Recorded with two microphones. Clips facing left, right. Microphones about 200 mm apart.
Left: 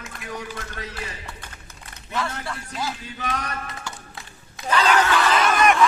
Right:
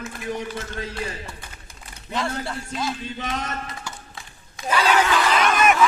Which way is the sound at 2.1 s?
25° right (ahead or behind).